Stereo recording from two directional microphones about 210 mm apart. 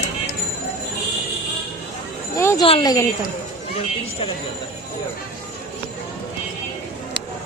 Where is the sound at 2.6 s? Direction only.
20° left (ahead or behind).